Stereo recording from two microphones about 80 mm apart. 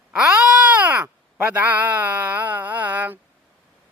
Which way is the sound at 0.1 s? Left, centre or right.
Centre.